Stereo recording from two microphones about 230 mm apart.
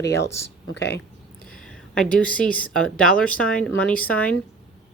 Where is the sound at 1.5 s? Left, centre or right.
Centre.